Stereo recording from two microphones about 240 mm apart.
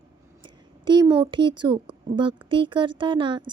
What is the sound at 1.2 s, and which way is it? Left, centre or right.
A woman's voice, centre.